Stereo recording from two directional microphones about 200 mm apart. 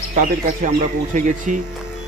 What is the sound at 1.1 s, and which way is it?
Speech, 40° right (ahead or behind).